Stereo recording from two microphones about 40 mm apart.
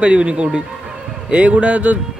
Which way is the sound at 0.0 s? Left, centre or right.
Right.